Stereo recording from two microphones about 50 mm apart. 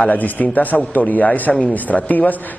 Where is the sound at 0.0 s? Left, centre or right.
Left.